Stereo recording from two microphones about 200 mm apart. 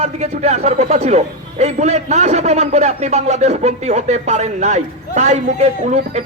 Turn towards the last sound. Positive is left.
turn(degrees=-35)  # may be behind; listen again after turning